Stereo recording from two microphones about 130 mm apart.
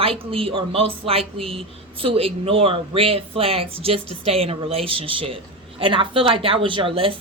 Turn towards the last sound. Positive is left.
turn(degrees=-45)  # may be behind; listen again after turning